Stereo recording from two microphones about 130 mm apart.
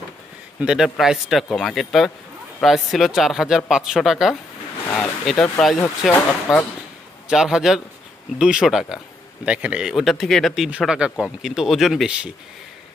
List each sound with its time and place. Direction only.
0.6 s speech: 5° right (ahead or behind)
6.1 s speech: 15° left (ahead or behind)
7.2 s speech: 5° right (ahead or behind)